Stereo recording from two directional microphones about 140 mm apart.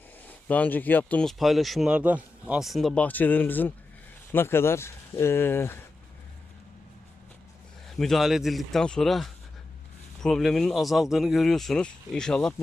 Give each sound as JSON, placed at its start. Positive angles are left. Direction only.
{"t": 0.3, "sound": "speech", "side_deg": 10}
{"t": 7.9, "sound": "speech", "side_deg": 5}